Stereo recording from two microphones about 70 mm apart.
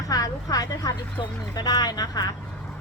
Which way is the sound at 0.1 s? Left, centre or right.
Left.